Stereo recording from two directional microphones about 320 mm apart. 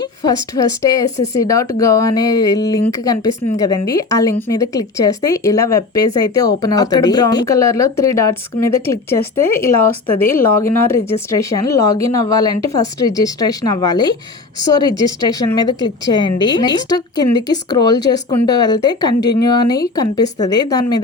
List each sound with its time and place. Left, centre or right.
0.0 s a woman's voice: centre